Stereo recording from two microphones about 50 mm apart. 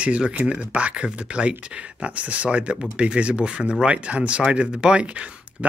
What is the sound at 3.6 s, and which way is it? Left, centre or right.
Speech, centre.